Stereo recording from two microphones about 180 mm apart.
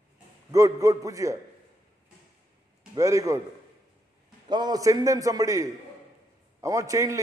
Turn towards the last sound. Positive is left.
turn(degrees=-20)  # may be behind; listen again after turning